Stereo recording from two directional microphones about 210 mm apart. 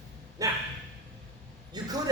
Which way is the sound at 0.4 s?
15° right (ahead or behind).